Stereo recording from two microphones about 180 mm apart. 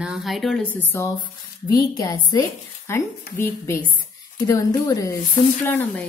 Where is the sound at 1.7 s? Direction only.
20° left (ahead or behind).